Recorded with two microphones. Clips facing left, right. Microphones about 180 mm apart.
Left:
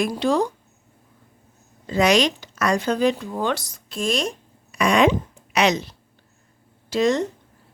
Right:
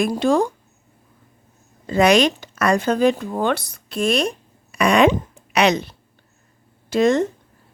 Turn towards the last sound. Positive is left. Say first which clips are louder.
# right 3 dB
turn(degrees=-55)  # may be behind; listen again after turning